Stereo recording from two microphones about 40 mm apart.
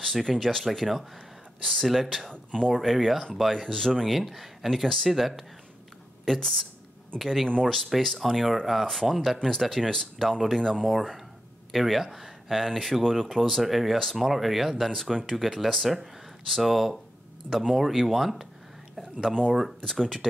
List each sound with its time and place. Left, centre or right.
0.0 s speech: centre
2.3 s speech: left
2.7 s speech: centre
4.1 s speech: centre
4.8 s speech: centre
6.2 s speech: centre
7.2 s speech: centre
7.6 s speech: centre
13.5 s speech: centre
19.9 s speech: centre